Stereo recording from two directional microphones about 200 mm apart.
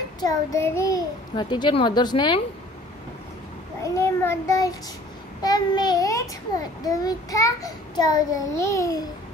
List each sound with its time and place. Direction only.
0.2 s a child's voice: 15° left (ahead or behind)
3.8 s a child's voice: 15° left (ahead or behind)